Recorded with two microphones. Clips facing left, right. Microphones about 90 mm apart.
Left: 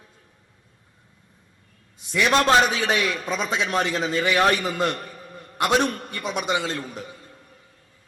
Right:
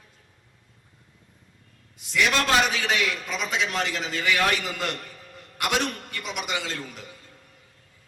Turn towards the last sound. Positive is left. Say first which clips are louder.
# left 5 dB
turn(degrees=25)  # may be behind; listen again after turning